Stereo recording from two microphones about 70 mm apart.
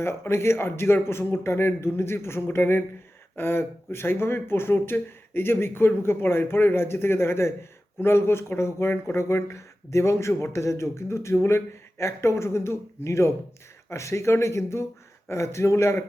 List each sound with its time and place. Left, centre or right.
0.0 s speech: left